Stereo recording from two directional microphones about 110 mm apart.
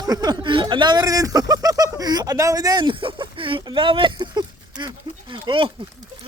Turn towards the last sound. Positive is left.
turn(degrees=-50)  # may be behind; listen again after turning